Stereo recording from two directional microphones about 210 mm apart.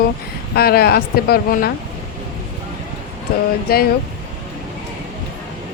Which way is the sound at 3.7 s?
45° left (ahead or behind).